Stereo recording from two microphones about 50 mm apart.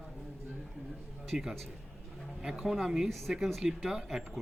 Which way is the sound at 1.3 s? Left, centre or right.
Right.